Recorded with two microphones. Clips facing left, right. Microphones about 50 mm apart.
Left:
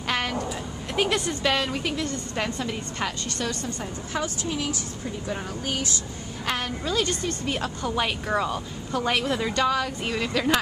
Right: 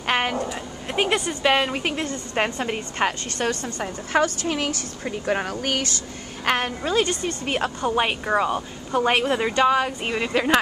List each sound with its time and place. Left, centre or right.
0.0 s a sound: right
1.4 s a woman's voice: right
6.4 s a woman's voice: right